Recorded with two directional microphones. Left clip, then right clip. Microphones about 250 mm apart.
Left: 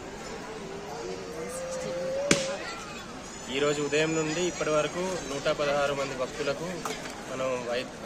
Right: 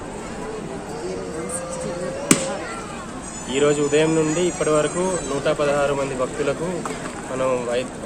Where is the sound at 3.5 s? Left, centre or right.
Centre.